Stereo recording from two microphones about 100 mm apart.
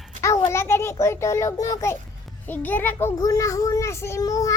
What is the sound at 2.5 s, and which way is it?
Speech, 20° left (ahead or behind).